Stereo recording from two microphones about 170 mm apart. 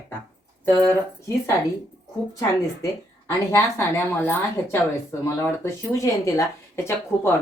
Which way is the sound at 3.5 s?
15° left (ahead or behind).